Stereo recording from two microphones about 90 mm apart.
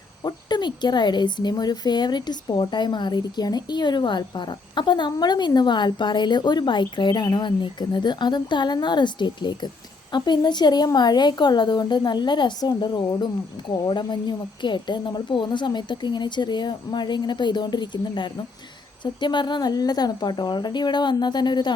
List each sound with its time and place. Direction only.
0.3 s speech: 55° left (ahead or behind)